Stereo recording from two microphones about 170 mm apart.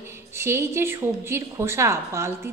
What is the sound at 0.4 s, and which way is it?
A woman's voice, 15° right (ahead or behind).